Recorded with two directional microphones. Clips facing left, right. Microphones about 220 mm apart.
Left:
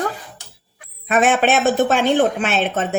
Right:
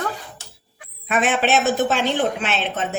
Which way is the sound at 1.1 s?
45° left (ahead or behind).